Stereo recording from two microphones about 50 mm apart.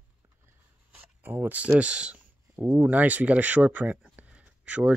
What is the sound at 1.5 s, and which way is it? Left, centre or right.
Speech, right.